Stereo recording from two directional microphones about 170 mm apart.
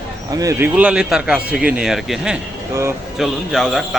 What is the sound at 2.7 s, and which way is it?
Speech, 15° right (ahead or behind).